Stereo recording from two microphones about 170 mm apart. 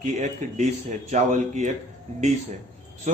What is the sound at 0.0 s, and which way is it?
A man's voice, 45° right (ahead or behind).